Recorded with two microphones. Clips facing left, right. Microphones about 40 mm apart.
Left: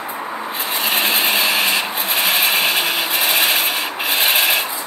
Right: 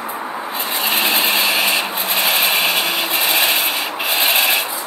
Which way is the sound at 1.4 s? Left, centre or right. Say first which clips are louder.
Even; centre.